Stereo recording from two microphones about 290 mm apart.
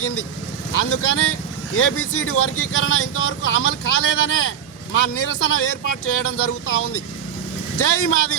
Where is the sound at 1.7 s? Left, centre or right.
Left.